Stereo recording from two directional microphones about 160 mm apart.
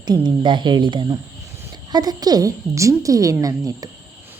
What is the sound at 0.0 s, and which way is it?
A woman's voice, 25° right (ahead or behind).